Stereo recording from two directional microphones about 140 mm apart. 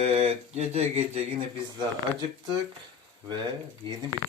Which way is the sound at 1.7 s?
30° right (ahead or behind).